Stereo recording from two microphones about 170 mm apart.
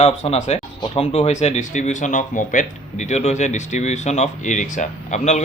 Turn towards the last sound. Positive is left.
turn(degrees=45)  # may be behind; listen again after turning